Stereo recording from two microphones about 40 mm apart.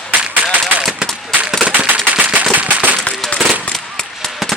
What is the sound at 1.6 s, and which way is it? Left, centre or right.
Firecracker, right.